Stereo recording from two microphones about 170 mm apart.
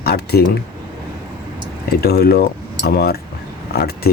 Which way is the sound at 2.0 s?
70° left (ahead or behind).